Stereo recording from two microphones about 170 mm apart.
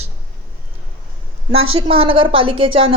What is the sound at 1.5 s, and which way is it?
Speech, 35° right (ahead or behind).